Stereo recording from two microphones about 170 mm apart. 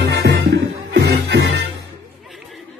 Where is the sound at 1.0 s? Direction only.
80° right.